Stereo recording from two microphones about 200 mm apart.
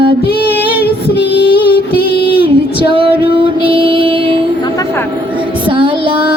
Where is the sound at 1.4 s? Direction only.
25° right (ahead or behind).